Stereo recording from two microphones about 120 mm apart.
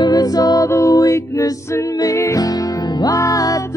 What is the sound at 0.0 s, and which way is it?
Music, 30° left (ahead or behind).